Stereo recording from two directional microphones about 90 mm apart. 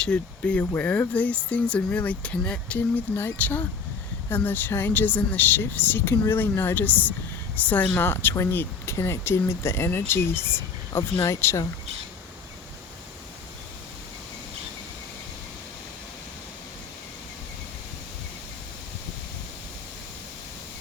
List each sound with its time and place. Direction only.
0.0 s speech: 10° left (ahead or behind); by 11.6 s 30° left (ahead or behind)